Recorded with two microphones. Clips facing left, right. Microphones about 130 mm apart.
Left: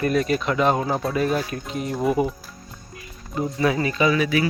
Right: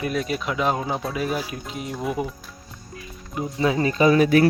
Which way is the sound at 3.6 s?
25° right (ahead or behind).